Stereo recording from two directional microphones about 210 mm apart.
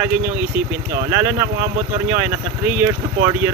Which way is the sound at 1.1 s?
15° right (ahead or behind).